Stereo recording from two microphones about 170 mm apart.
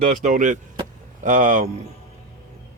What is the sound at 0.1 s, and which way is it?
Speech, 50° right (ahead or behind).